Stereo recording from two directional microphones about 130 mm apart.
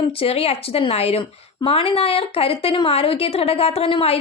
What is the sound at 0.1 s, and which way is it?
A woman's voice, 45° left (ahead or behind).